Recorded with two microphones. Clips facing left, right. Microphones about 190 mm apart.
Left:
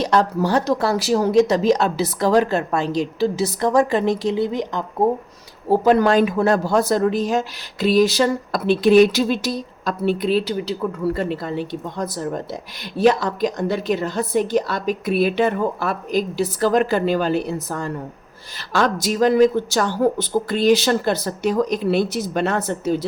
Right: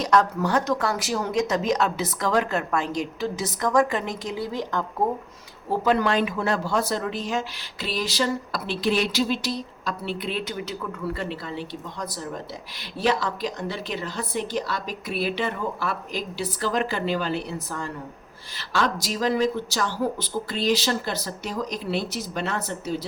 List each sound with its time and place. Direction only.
0.0 s speech: 30° left (ahead or behind)
5.6 s speech: 40° left (ahead or behind)